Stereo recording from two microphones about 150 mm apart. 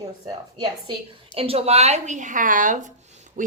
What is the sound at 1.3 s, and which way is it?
A woman's voice, 40° right (ahead or behind).